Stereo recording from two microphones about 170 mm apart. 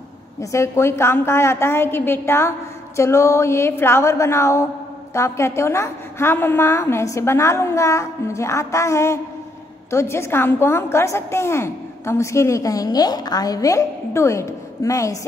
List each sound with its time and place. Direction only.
0.4 s a woman's voice: 15° left (ahead or behind)